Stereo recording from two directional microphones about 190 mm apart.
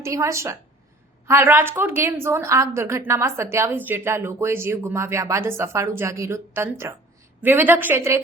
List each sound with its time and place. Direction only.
0.0 s speech: 15° right (ahead or behind)